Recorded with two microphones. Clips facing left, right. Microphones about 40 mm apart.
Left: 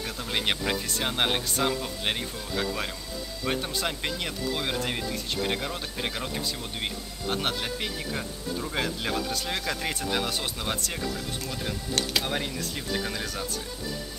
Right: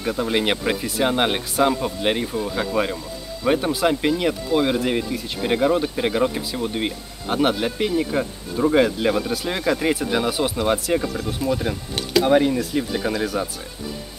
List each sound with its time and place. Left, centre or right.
0.0 s speech: centre
11.4 s speech: right
12.2 s speech: centre